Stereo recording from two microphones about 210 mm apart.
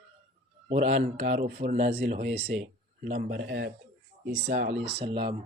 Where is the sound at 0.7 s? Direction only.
30° right (ahead or behind).